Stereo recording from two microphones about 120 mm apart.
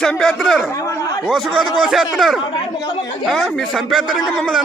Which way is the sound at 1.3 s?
5° right (ahead or behind).